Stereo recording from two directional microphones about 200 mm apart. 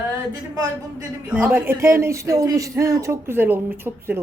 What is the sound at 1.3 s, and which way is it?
Speech, 10° right (ahead or behind).